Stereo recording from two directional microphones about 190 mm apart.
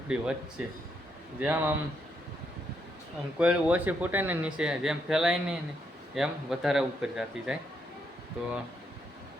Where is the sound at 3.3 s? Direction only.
5° right (ahead or behind).